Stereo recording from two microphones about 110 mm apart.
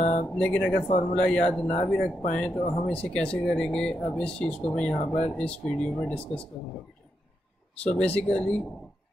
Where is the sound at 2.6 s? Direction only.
70° left (ahead or behind).